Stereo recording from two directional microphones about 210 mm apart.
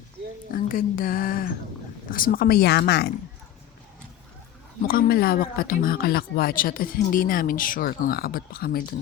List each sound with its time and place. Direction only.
0.5 s speech: 40° left (ahead or behind)
4.9 s speech: 45° left (ahead or behind)